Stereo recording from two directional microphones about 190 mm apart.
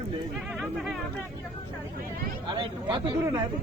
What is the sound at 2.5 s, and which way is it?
Speech, 25° right (ahead or behind).